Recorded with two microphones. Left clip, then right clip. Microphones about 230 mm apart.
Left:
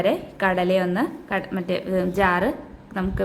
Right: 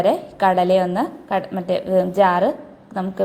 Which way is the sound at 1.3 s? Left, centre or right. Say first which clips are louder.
Right 4 dB; centre.